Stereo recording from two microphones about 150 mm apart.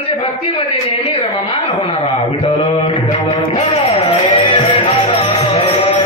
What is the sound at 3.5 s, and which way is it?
Music, 45° left (ahead or behind).